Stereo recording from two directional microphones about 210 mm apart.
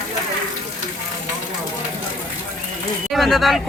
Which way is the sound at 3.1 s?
Centre (ahead or behind).